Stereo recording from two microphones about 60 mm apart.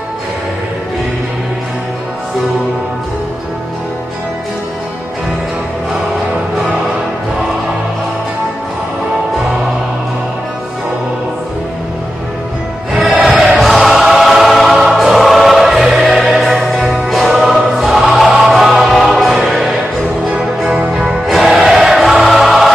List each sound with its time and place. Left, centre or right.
12.9 s music: right
13.4 s music: centre
20.3 s music: centre